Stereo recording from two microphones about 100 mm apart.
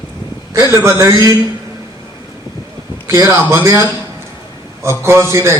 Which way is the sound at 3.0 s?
30° right (ahead or behind).